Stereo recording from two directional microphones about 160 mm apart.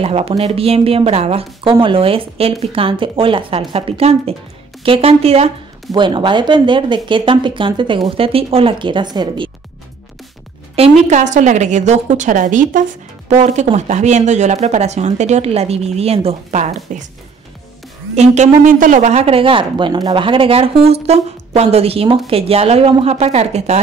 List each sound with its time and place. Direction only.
0.0 s speech: 40° right (ahead or behind)
10.8 s speech: 50° right (ahead or behind)
18.1 s speech: 45° right (ahead or behind)